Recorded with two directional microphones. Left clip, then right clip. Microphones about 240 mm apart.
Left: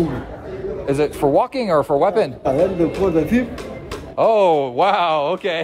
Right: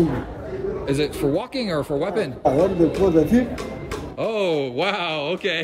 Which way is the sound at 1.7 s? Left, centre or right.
Centre.